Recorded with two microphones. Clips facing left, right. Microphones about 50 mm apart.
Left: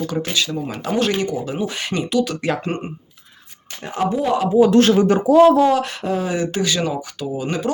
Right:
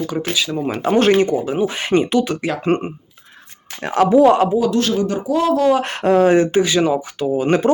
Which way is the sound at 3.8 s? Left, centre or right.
Right.